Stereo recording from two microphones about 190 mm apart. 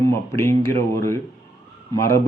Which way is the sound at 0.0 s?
15° left (ahead or behind).